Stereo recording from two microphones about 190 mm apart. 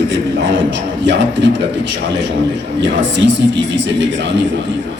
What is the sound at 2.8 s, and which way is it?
A man's voice, 75° right (ahead or behind).